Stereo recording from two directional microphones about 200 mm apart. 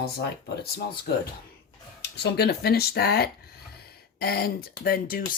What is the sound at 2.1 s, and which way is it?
Speech, 55° left (ahead or behind).